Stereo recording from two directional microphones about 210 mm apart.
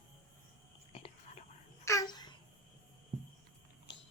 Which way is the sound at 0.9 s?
30° left (ahead or behind).